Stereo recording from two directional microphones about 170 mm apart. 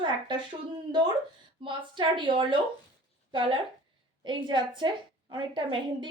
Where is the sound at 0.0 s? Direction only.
25° right (ahead or behind).